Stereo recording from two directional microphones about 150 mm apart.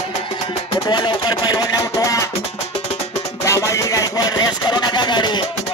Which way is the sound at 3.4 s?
20° left (ahead or behind).